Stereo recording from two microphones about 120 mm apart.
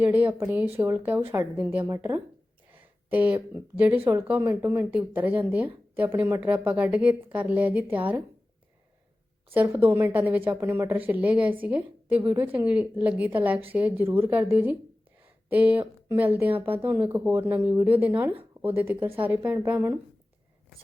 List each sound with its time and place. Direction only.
0.0 s speech: 15° right (ahead or behind)
9.5 s speech: 20° right (ahead or behind)
15.4 s speech: 15° right (ahead or behind)